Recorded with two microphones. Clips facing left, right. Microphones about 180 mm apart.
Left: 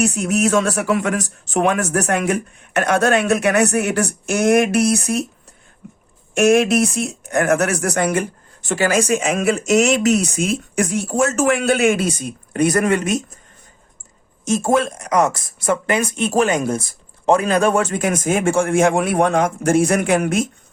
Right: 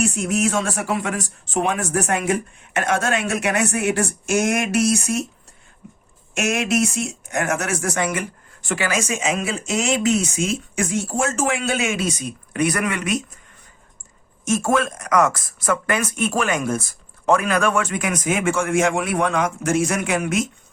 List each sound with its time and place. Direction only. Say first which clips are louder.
0.0 s speech: left 3 dB; 65° left (ahead or behind)
6.3 s speech: left 7 dB; 55° left (ahead or behind)
14.6 s speech: left 5 dB; 25° left (ahead or behind)
17.2 s speech: left 3 dB; 25° left (ahead or behind); by 20.3 s 55° left (ahead or behind)